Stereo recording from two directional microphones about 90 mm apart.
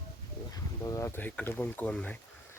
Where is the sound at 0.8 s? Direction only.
35° left (ahead or behind).